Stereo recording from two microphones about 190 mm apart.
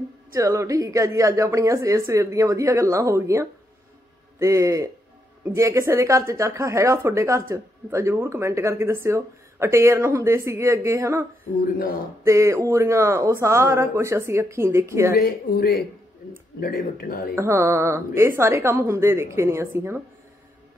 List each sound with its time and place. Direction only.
0.3 s speech: 15° right (ahead or behind)
11.6 s speech: 50° left (ahead or behind)
12.3 s speech: 15° right (ahead or behind)
15.1 s speech: 55° left (ahead or behind)
17.4 s speech: 15° right (ahead or behind)